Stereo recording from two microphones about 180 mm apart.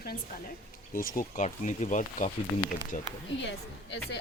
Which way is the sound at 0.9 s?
50° left (ahead or behind).